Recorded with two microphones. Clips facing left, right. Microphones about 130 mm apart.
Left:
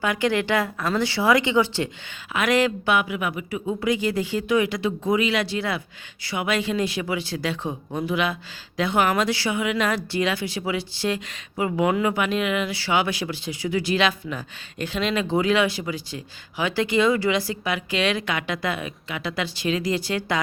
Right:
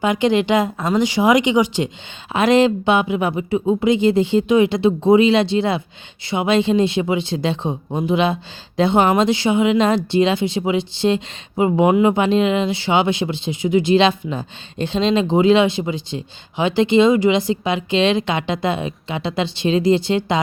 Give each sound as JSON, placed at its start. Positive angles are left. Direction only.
{"t": 0.0, "sound": "speech", "side_deg": -20}